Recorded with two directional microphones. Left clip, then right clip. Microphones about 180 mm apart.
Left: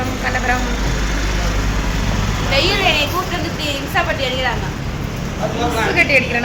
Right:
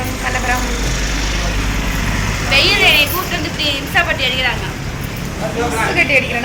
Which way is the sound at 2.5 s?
35° left (ahead or behind).